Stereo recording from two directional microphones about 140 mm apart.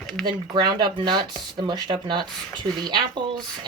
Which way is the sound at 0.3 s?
35° right (ahead or behind).